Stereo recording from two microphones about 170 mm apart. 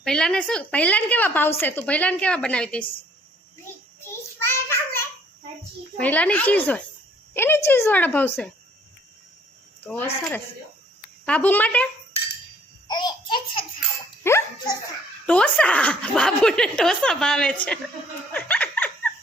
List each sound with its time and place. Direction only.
0.0 s a woman's voice: 5° left (ahead or behind)
3.7 s child singing: 15° left (ahead or behind)
6.0 s a woman's voice: 10° left (ahead or behind)
9.8 s a woman's voice: 10° left (ahead or behind)
12.9 s a child's voice: 25° left (ahead or behind)
14.3 s speech: 15° left (ahead or behind)
18.3 s dog: 10° left (ahead or behind)